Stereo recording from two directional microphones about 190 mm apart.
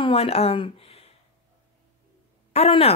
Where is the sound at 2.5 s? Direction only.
30° left (ahead or behind).